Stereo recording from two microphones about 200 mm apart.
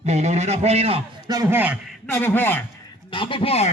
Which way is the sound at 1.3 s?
15° right (ahead or behind).